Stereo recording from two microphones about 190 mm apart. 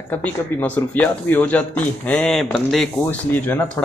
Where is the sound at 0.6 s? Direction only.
10° left (ahead or behind).